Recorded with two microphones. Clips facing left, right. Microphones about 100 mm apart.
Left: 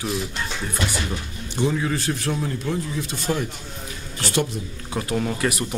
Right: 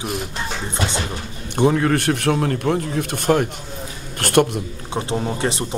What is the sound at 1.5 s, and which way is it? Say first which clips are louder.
A man's voice: right 6 dB; 60° right (ahead or behind).